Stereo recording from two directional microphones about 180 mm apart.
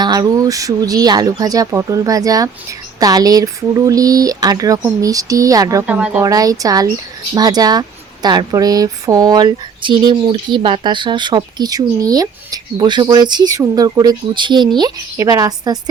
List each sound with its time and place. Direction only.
0.0 s speech: 20° right (ahead or behind)
5.8 s speech: 5° right (ahead or behind)
6.2 s speech: 20° right (ahead or behind)